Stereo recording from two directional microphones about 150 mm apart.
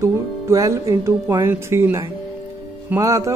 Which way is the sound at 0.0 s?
20° right (ahead or behind).